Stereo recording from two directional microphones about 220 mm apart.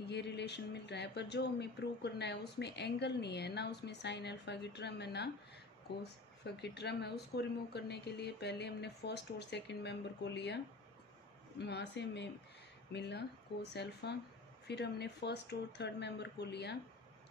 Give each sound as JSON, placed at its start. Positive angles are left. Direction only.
{"t": 0.0, "sound": "speech", "side_deg": 50}
{"t": 6.4, "sound": "speech", "side_deg": 50}